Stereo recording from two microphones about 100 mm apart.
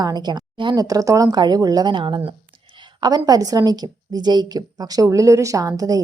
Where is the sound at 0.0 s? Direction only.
45° right (ahead or behind).